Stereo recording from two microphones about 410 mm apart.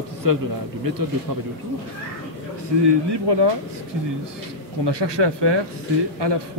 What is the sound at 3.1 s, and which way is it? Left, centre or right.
Speech, right.